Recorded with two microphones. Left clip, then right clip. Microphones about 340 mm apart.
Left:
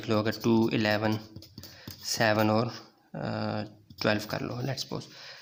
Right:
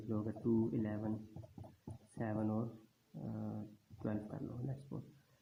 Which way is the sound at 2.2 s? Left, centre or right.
Left.